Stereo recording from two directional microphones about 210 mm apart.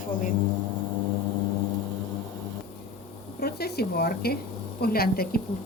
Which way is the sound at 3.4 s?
50° left (ahead or behind).